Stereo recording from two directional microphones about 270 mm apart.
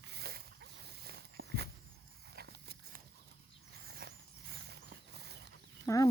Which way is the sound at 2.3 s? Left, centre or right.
Right.